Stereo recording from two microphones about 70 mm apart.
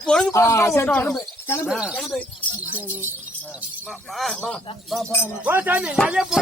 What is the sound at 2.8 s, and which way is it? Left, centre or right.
Speech, right.